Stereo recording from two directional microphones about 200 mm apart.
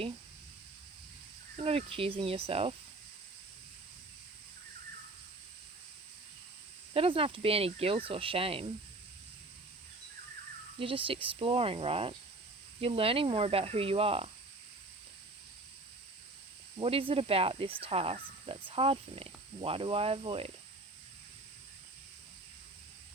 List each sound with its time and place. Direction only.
1.6 s speech: 30° right (ahead or behind)
6.9 s speech: 30° right (ahead or behind)
10.8 s speech: 25° right (ahead or behind)
16.8 s speech: 25° right (ahead or behind)